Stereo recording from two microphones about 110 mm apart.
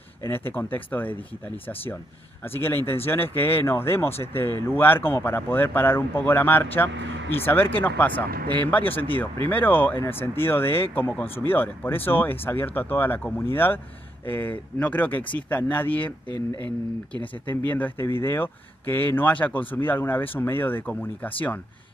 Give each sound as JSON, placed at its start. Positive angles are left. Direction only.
{"t": 0.2, "sound": "speech", "side_deg": 20}
{"t": 2.4, "sound": "speech", "side_deg": 20}
{"t": 16.3, "sound": "speech", "side_deg": -50}
{"t": 17.5, "sound": "speech", "side_deg": 15}